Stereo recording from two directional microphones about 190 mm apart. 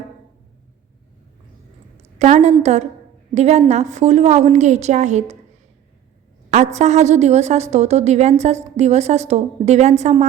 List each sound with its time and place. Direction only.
2.1 s a woman's voice: 35° right (ahead or behind)
6.7 s a woman's voice: 35° right (ahead or behind)